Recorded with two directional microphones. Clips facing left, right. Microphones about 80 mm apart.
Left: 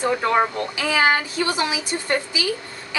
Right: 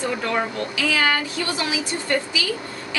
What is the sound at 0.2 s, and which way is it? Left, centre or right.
Speech, left.